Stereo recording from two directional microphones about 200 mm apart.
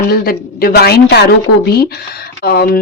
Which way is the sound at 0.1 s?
50° left (ahead or behind).